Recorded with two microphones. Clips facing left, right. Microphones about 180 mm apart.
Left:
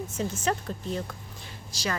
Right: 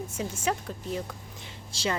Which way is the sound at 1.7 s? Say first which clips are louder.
Right 2 dB; 25° right (ahead or behind).